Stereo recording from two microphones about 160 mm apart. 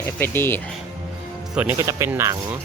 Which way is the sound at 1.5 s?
5° right (ahead or behind).